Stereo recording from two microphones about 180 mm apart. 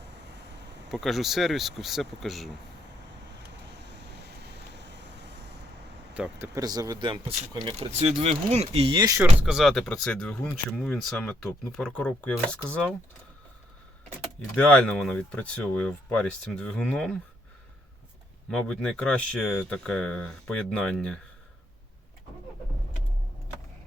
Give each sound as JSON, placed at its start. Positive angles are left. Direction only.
{"t": 0.0, "sound": "a sound", "side_deg": -75}
{"t": 0.9, "sound": "speech", "side_deg": 0}
{"t": 3.7, "sound": "vehicle", "side_deg": -75}
{"t": 6.1, "sound": "speech", "side_deg": -5}
{"t": 6.5, "sound": "speech", "side_deg": -20}
{"t": 9.5, "sound": "speech", "side_deg": 0}
{"t": 14.2, "sound": "speech", "side_deg": 5}
{"t": 18.5, "sound": "speech", "side_deg": 5}